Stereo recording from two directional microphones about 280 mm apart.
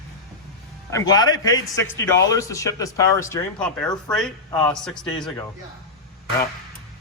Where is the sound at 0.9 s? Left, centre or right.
Centre.